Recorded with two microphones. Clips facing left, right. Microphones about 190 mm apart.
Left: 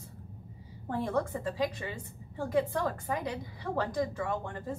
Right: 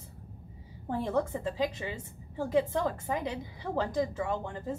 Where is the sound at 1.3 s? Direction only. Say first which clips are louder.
Right 1 dB; 25° right (ahead or behind).